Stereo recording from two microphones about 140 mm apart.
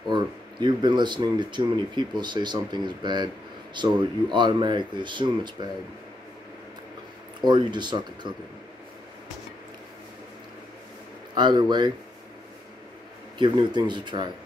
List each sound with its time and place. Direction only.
0.1 s speech: 30° right (ahead or behind)
7.4 s speech: 35° right (ahead or behind)
11.3 s speech: 30° right (ahead or behind)
13.4 s speech: 35° right (ahead or behind)